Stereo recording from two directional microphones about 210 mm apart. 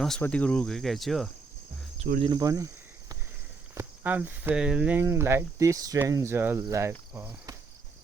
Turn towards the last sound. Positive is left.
turn(degrees=-10)  # may be behind; listen again after turning